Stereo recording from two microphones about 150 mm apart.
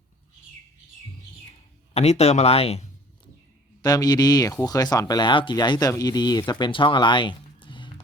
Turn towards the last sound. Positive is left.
turn(degrees=35)  # may be behind; listen again after turning